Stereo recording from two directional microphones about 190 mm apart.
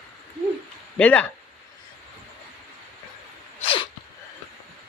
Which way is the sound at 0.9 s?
5° left (ahead or behind).